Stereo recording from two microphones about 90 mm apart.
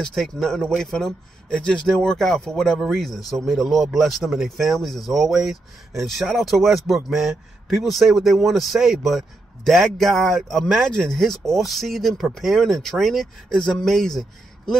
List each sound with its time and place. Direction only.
0.0 s speech: 5° left (ahead or behind)